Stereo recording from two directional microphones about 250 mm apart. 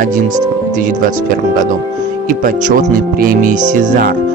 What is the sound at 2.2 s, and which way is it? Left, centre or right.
Speech, right.